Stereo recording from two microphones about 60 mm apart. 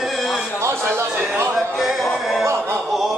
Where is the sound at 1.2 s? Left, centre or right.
Right.